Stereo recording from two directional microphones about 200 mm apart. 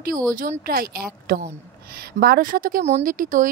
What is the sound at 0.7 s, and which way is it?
Speech, 45° right (ahead or behind).